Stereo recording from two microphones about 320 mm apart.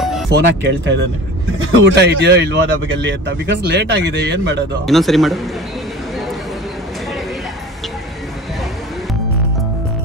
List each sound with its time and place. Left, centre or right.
0.3 s speech: right
4.8 s speech: centre